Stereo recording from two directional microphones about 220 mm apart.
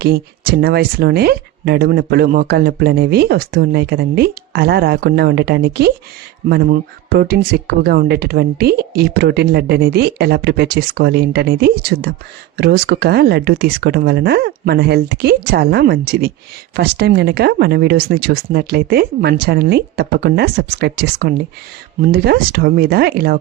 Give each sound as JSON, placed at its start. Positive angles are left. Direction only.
{"t": 0.0, "sound": "speech", "side_deg": -45}